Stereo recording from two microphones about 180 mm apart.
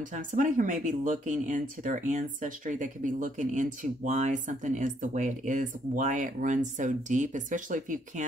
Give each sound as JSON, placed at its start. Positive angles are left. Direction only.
{"t": 0.1, "sound": "speech", "side_deg": -45}